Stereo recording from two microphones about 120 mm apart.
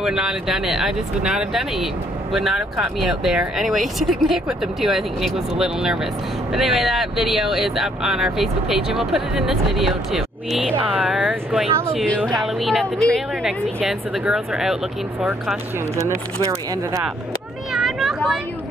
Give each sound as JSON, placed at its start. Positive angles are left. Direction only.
{"t": 0.0, "sound": "speech", "side_deg": -5}
{"t": 16.4, "sound": "speech", "side_deg": -25}
{"t": 17.7, "sound": "vehicle", "side_deg": -5}